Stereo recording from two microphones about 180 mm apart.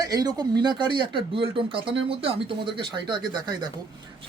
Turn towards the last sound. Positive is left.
turn(degrees=-25)  # may be behind; listen again after turning